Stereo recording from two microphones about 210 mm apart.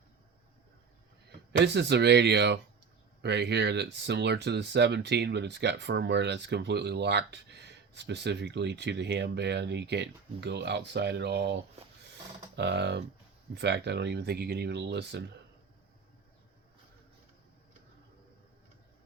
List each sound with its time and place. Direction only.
1.5 s speech: 55° right (ahead or behind)
12.5 s speech: 55° right (ahead or behind)